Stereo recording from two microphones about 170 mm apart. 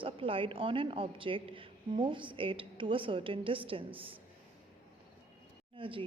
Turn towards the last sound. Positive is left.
turn(degrees=-30)  # may be behind; listen again after turning